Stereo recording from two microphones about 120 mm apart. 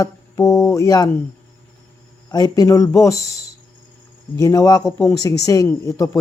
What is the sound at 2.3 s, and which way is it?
Speech, 30° left (ahead or behind).